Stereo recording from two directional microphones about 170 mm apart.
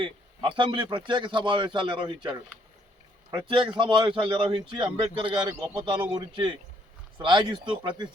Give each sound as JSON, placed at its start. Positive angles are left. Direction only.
{"t": 0.0, "sound": "a man's voice", "side_deg": -30}
{"t": 3.3, "sound": "a man's voice", "side_deg": -30}